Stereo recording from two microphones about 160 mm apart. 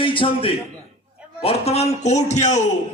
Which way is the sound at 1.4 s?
40° left (ahead or behind).